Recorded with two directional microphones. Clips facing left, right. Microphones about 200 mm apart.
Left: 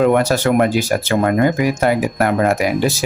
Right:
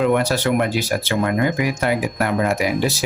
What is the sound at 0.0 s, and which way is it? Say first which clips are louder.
Speech: left 4 dB; 45° left (ahead or behind).